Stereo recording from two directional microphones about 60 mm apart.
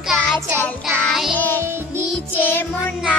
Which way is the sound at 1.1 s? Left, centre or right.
Centre.